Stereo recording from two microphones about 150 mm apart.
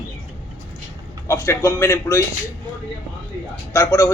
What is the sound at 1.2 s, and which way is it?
Speech, 20° left (ahead or behind).